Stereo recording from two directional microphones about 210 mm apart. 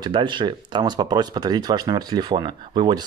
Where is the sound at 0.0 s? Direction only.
20° right (ahead or behind).